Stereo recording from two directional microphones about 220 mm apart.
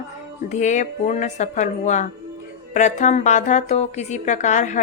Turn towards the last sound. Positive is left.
turn(degrees=35)  # may be behind; listen again after turning